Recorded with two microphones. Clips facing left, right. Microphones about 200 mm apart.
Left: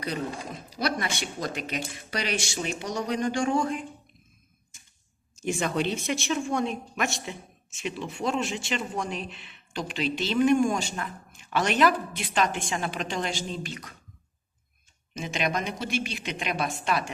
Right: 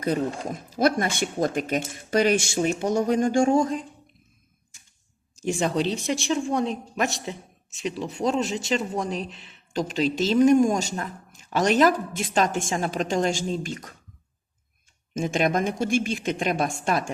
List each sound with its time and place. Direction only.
0.0 s a woman's voice: 50° right (ahead or behind)
5.4 s speech: 35° right (ahead or behind)
15.1 s a woman's voice: 50° right (ahead or behind)